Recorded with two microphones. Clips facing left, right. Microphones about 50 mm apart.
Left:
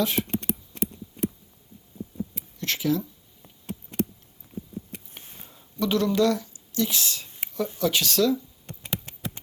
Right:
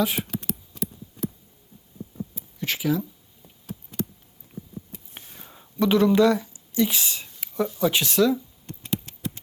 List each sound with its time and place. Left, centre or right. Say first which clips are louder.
2.6 s speech: right 1 dB; centre
5.3 s a sound: right 2 dB; right
5.8 s speech: right 4 dB; right
8.6 s computer keyboard: right 4 dB; centre